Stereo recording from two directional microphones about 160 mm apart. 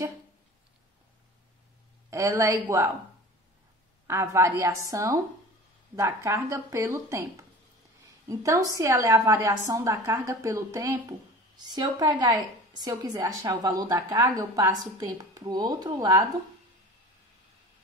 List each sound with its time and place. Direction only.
2.0 s a woman's voice: 20° right (ahead or behind)
4.1 s a woman's voice: 15° right (ahead or behind)
8.3 s a woman's voice: 20° right (ahead or behind)